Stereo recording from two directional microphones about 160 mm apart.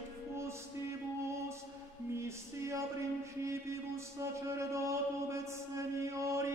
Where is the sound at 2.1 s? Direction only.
20° right (ahead or behind).